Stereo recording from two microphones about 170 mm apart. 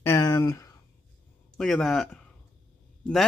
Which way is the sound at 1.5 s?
Centre (ahead or behind).